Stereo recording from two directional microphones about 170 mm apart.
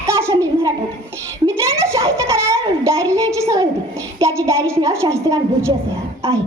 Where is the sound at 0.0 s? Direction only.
15° right (ahead or behind).